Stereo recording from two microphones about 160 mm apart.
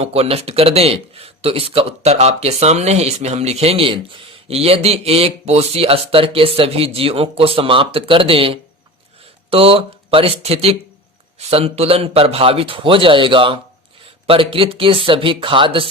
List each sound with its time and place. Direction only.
0.0 s speech: 40° right (ahead or behind)